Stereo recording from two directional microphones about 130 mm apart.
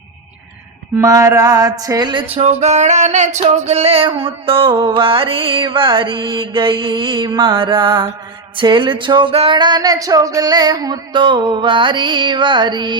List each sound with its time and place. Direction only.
0.9 s music: 25° right (ahead or behind)
2.3 s music: 50° right (ahead or behind)
9.6 s music: 35° right (ahead or behind)